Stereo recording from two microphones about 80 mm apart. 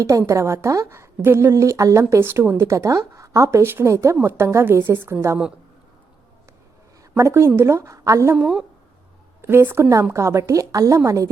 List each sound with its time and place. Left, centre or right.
0.0 s speech: right
7.2 s speech: right
9.4 s a woman's voice: right